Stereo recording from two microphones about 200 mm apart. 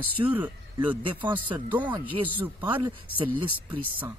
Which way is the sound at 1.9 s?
25° right (ahead or behind).